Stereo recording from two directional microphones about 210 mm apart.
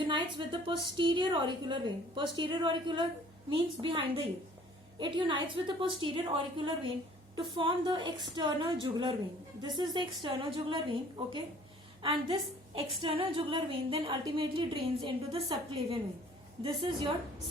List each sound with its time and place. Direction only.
0.0 s a woman's voice: 20° right (ahead or behind)